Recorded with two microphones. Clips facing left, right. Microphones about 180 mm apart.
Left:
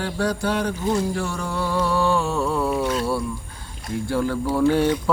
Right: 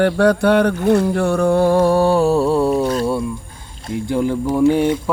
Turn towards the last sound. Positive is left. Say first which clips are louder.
# right 4 dB
turn(degrees=-15)  # may be behind; listen again after turning